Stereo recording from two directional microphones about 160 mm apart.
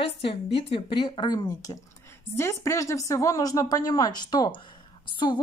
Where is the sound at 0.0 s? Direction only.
35° left (ahead or behind).